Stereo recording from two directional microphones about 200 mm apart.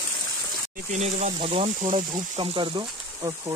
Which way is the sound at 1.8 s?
40° right (ahead or behind).